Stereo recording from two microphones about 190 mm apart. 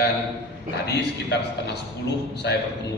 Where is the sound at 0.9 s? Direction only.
65° left (ahead or behind).